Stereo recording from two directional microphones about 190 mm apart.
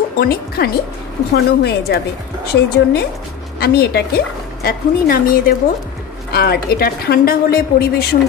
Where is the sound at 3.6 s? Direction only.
55° left (ahead or behind).